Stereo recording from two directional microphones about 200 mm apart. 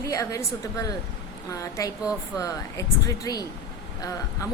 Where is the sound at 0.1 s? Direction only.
15° left (ahead or behind).